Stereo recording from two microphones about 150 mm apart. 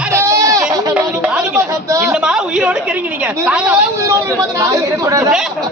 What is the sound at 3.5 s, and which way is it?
Speech, 5° right (ahead or behind).